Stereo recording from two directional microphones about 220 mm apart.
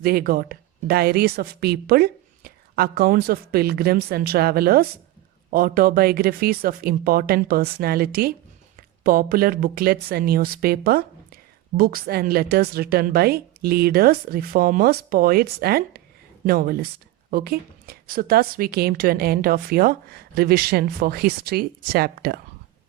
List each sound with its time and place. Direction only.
0.0 s a woman's voice: 45° right (ahead or behind)